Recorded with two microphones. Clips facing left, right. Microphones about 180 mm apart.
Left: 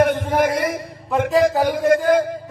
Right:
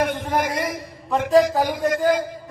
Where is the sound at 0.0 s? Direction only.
55° left (ahead or behind).